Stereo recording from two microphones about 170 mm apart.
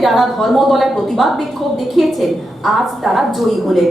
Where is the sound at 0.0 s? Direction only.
Centre (ahead or behind).